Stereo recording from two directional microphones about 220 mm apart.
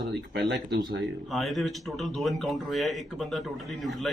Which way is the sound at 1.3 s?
Centre (ahead or behind).